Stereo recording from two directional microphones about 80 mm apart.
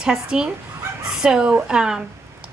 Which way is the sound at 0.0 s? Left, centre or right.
Centre.